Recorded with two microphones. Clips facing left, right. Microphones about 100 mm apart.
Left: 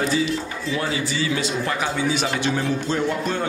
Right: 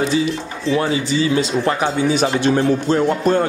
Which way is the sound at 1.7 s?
40° right (ahead or behind).